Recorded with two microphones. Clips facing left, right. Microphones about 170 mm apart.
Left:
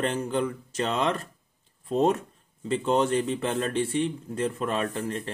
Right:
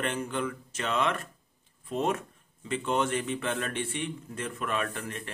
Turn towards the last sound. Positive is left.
turn(degrees=30)  # may be behind; listen again after turning